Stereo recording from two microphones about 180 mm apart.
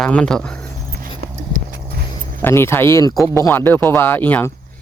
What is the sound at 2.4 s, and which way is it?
Speech, 15° left (ahead or behind).